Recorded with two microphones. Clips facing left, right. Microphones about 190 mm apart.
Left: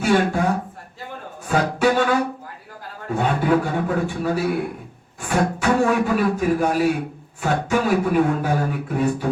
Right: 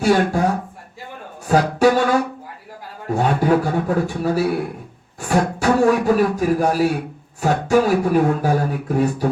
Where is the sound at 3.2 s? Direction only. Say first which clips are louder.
Right 2 dB; 40° right (ahead or behind).